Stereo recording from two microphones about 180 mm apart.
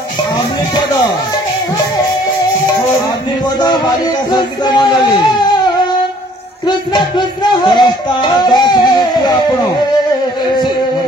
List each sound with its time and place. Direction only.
4.3 s music: 25° left (ahead or behind)
6.9 s music: 25° left (ahead or behind)